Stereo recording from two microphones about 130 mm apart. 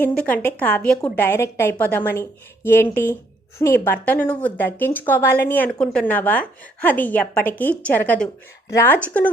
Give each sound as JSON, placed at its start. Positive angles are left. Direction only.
{"t": 0.0, "sound": "a woman's voice", "side_deg": 10}